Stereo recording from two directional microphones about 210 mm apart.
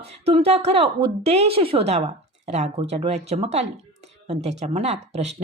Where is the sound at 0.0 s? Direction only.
30° right (ahead or behind).